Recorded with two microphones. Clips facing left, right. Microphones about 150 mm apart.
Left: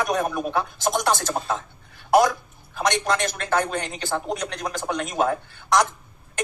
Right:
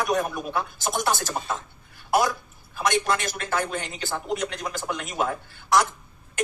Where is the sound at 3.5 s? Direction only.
50° left (ahead or behind).